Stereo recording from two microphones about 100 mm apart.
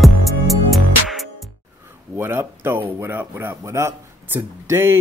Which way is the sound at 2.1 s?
25° right (ahead or behind).